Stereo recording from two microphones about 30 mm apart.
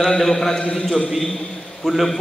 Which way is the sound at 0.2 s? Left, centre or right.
Centre.